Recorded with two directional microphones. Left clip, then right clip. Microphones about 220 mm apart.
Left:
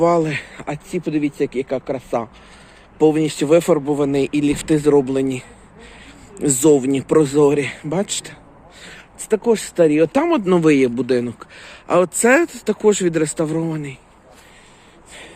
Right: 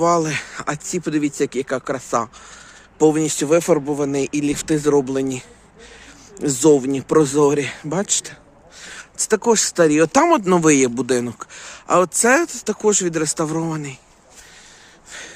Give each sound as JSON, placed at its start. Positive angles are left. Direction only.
{"t": 0.0, "sound": "speech", "side_deg": -15}
{"t": 3.0, "sound": "speech", "side_deg": -20}